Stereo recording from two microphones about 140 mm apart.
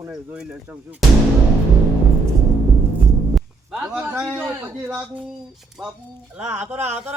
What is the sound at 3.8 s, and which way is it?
A man's voice, 5° right (ahead or behind).